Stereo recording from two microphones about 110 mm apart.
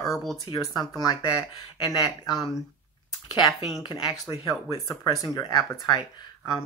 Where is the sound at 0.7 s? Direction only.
35° left (ahead or behind).